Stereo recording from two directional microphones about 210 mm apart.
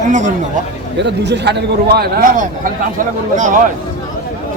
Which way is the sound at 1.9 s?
45° right (ahead or behind).